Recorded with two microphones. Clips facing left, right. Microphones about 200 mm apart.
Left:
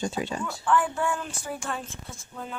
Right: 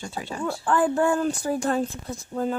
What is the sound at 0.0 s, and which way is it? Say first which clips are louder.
Speech: left 4 dB; 20° left (ahead or behind).